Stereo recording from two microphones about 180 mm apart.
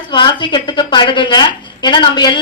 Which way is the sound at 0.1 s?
25° left (ahead or behind).